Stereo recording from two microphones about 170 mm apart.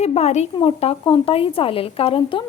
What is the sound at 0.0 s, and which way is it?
A woman's voice, 40° left (ahead or behind).